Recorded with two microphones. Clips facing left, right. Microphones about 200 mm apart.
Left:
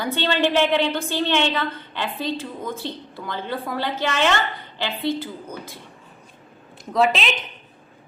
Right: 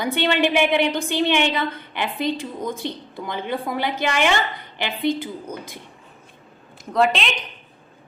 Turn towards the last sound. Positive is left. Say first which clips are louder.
# even
turn(degrees=0)  # may be behind; listen again after turning